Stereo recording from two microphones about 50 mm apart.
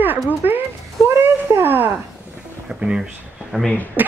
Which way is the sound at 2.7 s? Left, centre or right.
Centre.